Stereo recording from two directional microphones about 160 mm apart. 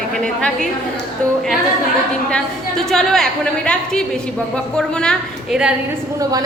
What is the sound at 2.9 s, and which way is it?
Speech, centre (ahead or behind).